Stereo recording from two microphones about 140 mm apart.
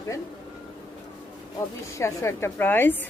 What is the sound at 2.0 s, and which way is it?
A woman's voice, 20° left (ahead or behind).